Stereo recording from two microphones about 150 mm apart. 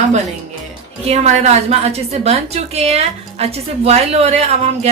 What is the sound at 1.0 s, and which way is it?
A woman's voice, 45° right (ahead or behind).